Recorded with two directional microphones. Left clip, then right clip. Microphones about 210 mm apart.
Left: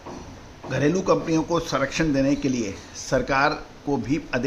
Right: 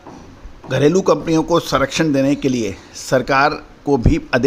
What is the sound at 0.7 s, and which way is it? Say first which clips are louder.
Speech: right 7 dB; 40° right (ahead or behind).